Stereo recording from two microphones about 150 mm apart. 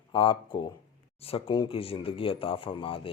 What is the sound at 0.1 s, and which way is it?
Speech, 35° left (ahead or behind).